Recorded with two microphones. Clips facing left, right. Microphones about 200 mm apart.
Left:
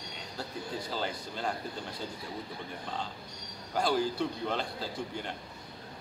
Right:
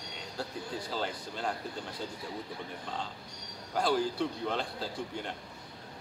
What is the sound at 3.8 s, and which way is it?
Speech, centre (ahead or behind).